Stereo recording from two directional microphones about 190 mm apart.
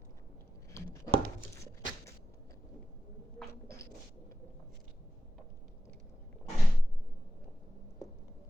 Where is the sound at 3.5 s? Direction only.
15° left (ahead or behind).